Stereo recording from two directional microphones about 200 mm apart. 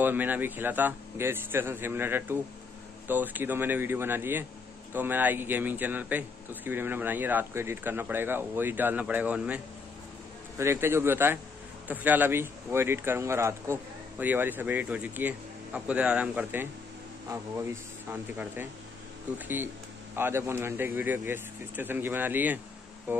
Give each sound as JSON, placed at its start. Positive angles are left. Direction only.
{"t": 0.0, "sound": "speech", "side_deg": -10}
{"t": 10.6, "sound": "speech", "side_deg": -15}